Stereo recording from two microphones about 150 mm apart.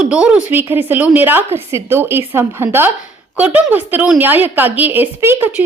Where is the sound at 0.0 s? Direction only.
5° right (ahead or behind).